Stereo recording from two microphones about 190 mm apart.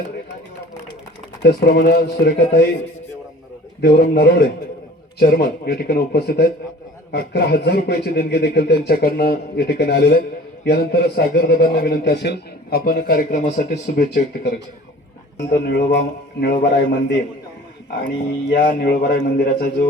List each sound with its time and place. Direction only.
1.4 s speech: 60° left (ahead or behind)
3.8 s speech: 50° left (ahead or behind)
18.5 s speech: 60° left (ahead or behind)